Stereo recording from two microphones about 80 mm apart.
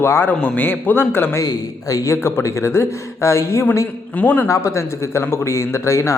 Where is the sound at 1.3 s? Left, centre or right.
Left.